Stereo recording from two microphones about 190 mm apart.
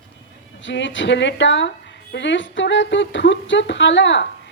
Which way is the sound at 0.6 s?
75° left (ahead or behind).